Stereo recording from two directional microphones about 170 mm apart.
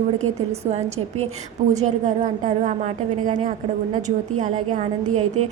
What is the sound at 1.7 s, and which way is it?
A woman's voice, 40° right (ahead or behind).